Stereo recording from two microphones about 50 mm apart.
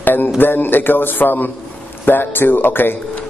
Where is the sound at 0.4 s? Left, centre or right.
Left.